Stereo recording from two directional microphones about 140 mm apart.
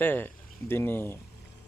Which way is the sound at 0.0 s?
15° left (ahead or behind).